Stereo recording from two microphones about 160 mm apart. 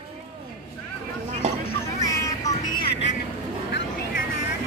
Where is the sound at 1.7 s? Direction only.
20° left (ahead or behind).